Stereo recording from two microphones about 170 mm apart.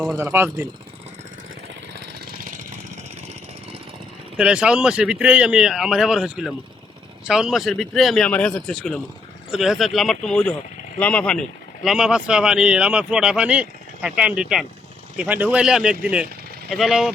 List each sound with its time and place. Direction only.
0.2 s speech: 15° right (ahead or behind)
2.1 s vehicle: 60° right (ahead or behind); by 3.8 s 40° right (ahead or behind)
4.4 s speech: 5° right (ahead or behind)